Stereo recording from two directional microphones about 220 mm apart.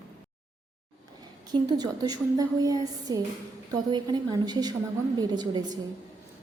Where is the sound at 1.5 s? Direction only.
15° right (ahead or behind).